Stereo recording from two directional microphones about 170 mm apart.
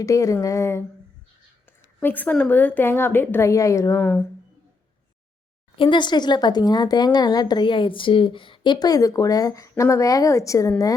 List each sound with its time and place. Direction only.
0.0 s a woman's voice: 20° left (ahead or behind)
5.7 s speech: 30° left (ahead or behind)